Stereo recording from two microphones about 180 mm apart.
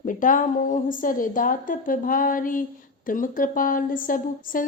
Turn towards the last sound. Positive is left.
turn(degrees=50)  # may be behind; listen again after turning